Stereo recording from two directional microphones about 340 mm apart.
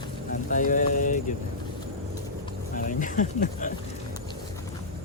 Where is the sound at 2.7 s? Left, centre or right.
Left.